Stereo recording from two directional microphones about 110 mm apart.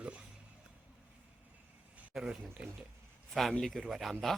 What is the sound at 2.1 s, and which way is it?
Speech, 5° right (ahead or behind).